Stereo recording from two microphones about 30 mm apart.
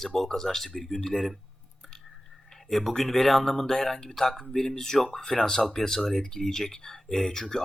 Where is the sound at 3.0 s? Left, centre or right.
Centre.